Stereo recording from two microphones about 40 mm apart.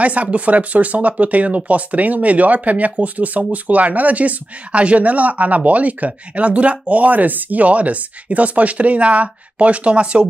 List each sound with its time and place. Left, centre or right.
0.0 s speech: right